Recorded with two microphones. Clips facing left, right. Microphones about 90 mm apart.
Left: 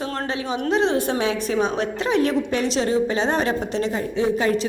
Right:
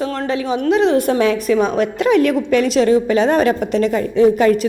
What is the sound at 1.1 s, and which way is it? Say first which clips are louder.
Speech: right 7 dB; 50° right (ahead or behind).